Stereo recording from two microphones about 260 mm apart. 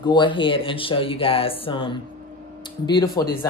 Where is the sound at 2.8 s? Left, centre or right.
Centre.